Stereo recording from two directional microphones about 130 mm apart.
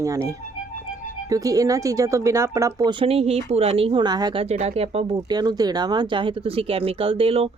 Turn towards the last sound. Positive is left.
turn(degrees=-45)  # may be behind; listen again after turning